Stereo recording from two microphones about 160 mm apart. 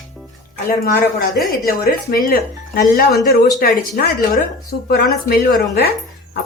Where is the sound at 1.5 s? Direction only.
65° left (ahead or behind).